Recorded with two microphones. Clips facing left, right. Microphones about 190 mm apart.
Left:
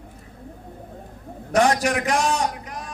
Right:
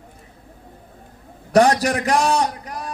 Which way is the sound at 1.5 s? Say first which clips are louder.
Right 4 dB; 35° right (ahead or behind).